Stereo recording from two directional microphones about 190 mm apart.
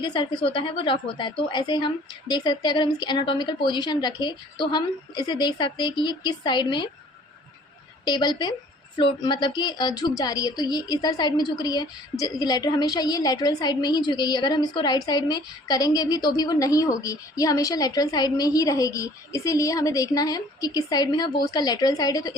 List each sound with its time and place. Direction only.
0.0 s a woman's voice: 25° left (ahead or behind)
8.0 s a woman's voice: 25° left (ahead or behind)